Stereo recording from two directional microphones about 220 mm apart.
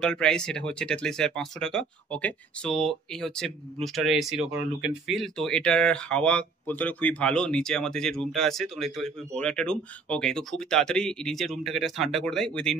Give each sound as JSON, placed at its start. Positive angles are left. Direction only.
{"t": 0.0, "sound": "speech", "side_deg": 5}